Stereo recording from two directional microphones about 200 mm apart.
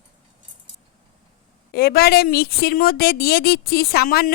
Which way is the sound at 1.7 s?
50° left (ahead or behind).